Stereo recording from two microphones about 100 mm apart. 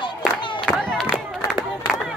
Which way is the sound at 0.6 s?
10° left (ahead or behind).